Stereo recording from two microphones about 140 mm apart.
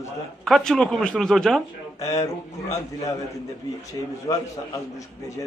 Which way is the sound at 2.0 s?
25° left (ahead or behind).